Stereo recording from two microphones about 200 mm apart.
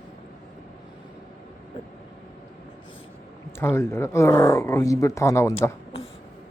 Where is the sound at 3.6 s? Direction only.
10° left (ahead or behind).